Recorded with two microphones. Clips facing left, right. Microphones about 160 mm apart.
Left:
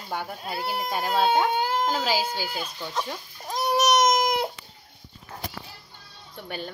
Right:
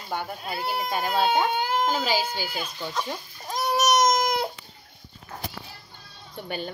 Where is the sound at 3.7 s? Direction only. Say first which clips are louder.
Left 1 dB; 20° left (ahead or behind).